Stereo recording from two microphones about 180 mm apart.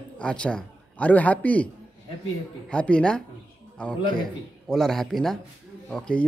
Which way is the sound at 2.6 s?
5° left (ahead or behind).